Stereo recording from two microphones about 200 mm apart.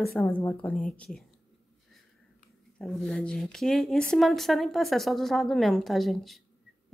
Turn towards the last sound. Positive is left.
turn(degrees=0)  # may be behind; listen again after turning